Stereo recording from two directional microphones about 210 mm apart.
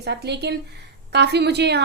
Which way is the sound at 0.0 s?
50° right (ahead or behind).